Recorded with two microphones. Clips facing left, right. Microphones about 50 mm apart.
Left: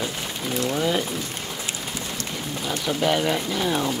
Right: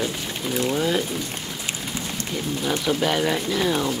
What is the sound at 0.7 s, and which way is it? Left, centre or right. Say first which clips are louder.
Speech: even; centre.